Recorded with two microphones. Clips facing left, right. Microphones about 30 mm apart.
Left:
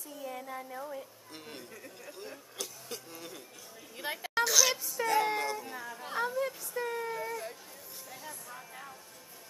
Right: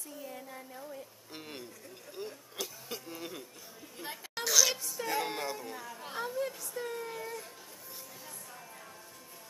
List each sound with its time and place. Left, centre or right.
0.4 s speech: centre
1.3 s a sound: centre
3.9 s speech: left
4.4 s a sound: centre
8.2 s music: centre
8.5 s music: centre